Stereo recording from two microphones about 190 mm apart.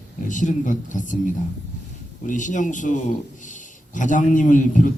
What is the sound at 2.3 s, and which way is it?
A man's voice, 40° left (ahead or behind).